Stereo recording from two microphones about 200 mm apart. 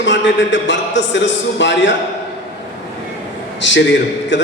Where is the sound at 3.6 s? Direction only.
65° left (ahead or behind).